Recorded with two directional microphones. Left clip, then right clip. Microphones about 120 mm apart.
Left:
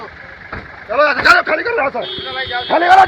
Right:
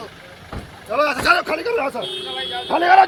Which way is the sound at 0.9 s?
20° right (ahead or behind).